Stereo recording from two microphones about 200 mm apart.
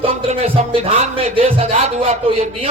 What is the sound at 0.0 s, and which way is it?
Music, 25° right (ahead or behind).